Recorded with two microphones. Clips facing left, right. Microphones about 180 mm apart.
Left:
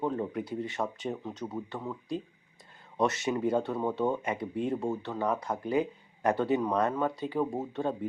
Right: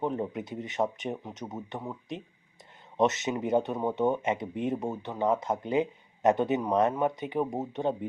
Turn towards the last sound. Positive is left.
turn(degrees=-20)  # may be behind; listen again after turning